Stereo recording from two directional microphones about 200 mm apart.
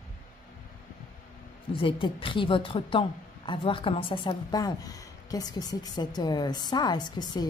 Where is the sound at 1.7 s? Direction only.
25° left (ahead or behind).